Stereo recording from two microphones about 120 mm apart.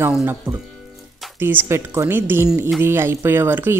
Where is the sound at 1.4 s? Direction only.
15° right (ahead or behind).